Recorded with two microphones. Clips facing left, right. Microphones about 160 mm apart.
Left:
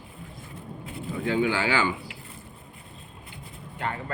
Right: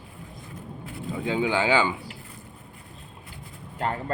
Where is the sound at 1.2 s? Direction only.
20° right (ahead or behind).